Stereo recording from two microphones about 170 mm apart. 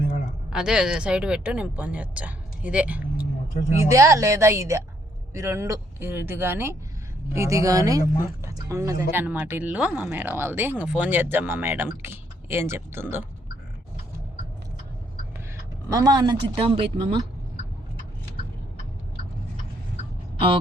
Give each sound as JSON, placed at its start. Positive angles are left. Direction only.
{"t": 0.5, "sound": "speech", "side_deg": -5}
{"t": 3.8, "sound": "speech", "side_deg": -20}
{"t": 15.9, "sound": "speech", "side_deg": -20}